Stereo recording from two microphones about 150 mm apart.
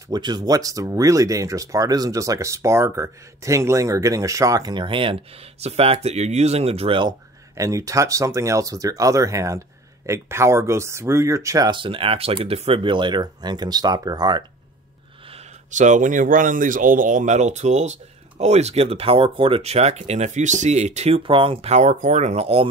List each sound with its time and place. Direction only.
0.1 s speech: 30° right (ahead or behind)
7.5 s speech: 20° right (ahead or behind)
15.7 s speech: 55° right (ahead or behind)